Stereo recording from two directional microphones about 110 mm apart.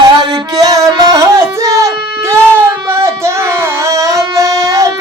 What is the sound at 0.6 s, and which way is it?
Music, 35° right (ahead or behind).